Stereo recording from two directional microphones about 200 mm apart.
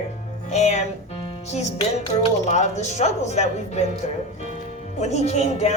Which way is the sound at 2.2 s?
35° left (ahead or behind).